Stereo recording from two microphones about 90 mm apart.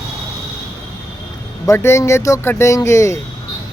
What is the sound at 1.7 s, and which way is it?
Speech, 30° left (ahead or behind).